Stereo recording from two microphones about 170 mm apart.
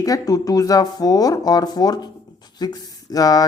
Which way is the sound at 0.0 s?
20° left (ahead or behind).